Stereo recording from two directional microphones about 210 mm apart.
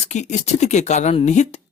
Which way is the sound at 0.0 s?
35° left (ahead or behind).